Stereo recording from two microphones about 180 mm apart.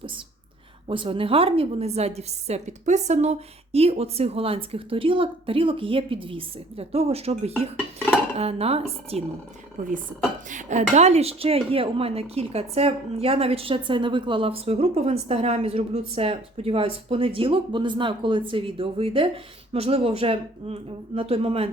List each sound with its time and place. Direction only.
0.9 s a woman's voice: 30° right (ahead or behind)
10.5 s a woman's voice: 40° right (ahead or behind)